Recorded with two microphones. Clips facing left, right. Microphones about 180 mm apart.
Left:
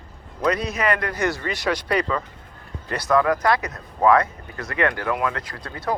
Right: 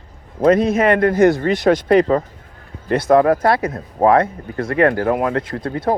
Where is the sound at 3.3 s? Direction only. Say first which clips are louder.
Right 5 dB; 30° right (ahead or behind).